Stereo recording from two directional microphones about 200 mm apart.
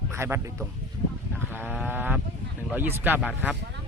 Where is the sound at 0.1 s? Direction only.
10° right (ahead or behind).